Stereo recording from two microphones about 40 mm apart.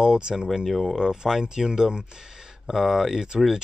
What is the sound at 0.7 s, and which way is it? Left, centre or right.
Speech, centre.